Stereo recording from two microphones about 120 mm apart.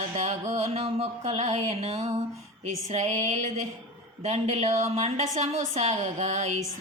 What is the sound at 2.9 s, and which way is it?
A woman's voice, 75° right (ahead or behind).